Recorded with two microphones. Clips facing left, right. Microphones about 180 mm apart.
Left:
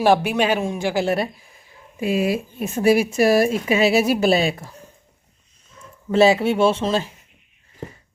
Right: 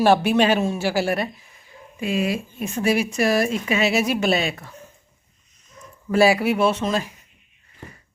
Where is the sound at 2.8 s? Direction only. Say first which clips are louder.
Left 4 dB; 30° left (ahead or behind).